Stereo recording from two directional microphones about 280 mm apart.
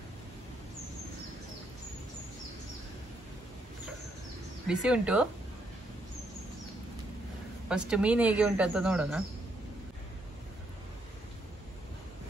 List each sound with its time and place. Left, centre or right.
4.6 s speech: centre
7.6 s speech: centre